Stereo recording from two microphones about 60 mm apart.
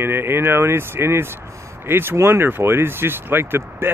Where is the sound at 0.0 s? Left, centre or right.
Right.